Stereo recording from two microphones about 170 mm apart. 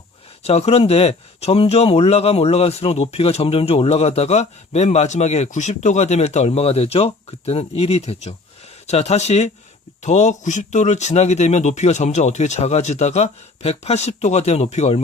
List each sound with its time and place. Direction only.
0.4 s a man's voice: 35° left (ahead or behind)